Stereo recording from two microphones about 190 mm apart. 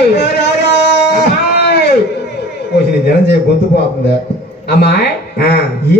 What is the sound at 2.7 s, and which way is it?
A man's voice, 60° left (ahead or behind).